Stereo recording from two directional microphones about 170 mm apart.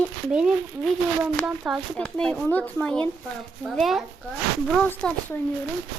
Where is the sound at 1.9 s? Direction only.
5° left (ahead or behind).